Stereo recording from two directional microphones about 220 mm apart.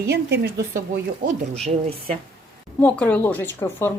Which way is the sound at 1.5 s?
30° right (ahead or behind).